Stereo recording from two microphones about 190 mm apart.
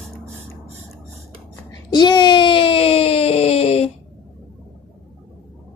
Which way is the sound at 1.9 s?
25° left (ahead or behind).